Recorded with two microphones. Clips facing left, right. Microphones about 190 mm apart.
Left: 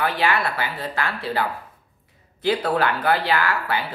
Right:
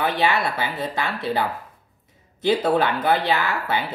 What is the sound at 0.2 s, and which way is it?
Speech, 20° right (ahead or behind).